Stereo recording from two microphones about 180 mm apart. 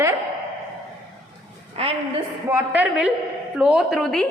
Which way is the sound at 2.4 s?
10° right (ahead or behind).